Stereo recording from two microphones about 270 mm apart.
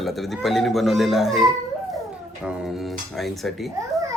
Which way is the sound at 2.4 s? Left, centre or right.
Centre.